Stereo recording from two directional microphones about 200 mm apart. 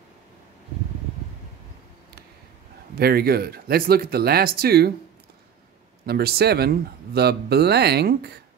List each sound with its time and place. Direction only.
3.0 s speech: 50° right (ahead or behind)
6.0 s speech: 50° right (ahead or behind)